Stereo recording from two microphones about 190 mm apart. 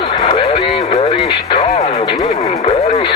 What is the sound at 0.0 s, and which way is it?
Music, 30° left (ahead or behind).